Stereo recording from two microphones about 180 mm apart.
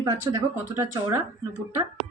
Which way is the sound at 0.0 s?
25° right (ahead or behind).